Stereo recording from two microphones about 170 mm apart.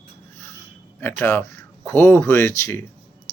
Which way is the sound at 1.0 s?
10° left (ahead or behind).